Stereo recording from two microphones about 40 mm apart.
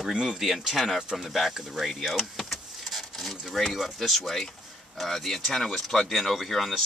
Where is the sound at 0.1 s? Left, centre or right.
Right.